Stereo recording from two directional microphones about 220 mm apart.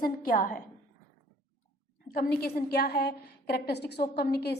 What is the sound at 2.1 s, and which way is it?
A woman's voice, 45° left (ahead or behind).